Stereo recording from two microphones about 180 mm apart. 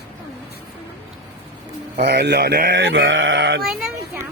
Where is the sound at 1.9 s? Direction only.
70° right (ahead or behind); by 3.6 s 90° right.